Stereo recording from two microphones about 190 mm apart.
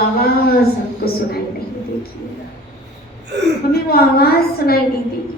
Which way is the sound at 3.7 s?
55° left (ahead or behind).